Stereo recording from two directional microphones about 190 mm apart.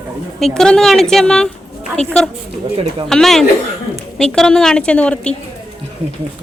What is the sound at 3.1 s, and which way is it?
A woman's voice, centre (ahead or behind).